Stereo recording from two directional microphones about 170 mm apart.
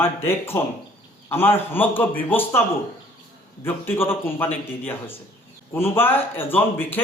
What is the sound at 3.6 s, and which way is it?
A man's voice, 15° left (ahead or behind).